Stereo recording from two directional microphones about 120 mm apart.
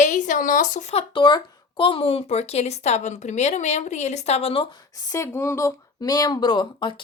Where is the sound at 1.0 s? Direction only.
40° left (ahead or behind).